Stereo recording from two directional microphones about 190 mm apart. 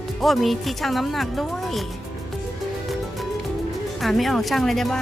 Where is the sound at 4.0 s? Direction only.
Centre (ahead or behind).